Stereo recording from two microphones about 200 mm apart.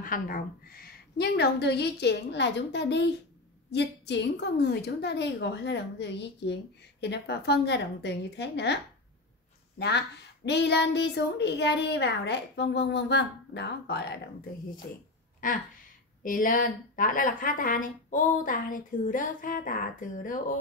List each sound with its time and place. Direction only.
0.0 s a woman's voice: 45° left (ahead or behind)
9.8 s a woman's voice: 55° left (ahead or behind)
16.2 s a woman's voice: 45° left (ahead or behind)